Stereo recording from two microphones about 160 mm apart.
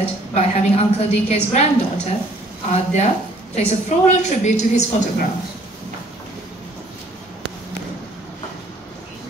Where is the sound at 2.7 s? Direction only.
45° left (ahead or behind).